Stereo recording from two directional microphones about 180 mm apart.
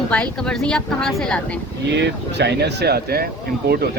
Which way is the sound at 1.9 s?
70° right (ahead or behind).